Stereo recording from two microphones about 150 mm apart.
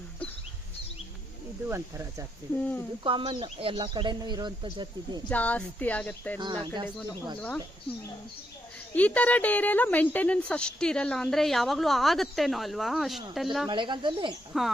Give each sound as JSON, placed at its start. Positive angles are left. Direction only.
{"t": 1.6, "sound": "speech", "side_deg": -20}
{"t": 2.6, "sound": "speech", "side_deg": 10}
{"t": 3.0, "sound": "speech", "side_deg": -35}
{"t": 5.3, "sound": "speech", "side_deg": 10}
{"t": 6.4, "sound": "speech", "side_deg": -30}
{"t": 9.0, "sound": "speech", "side_deg": 10}
{"t": 13.7, "sound": "speech", "side_deg": -30}
{"t": 14.5, "sound": "speech", "side_deg": 0}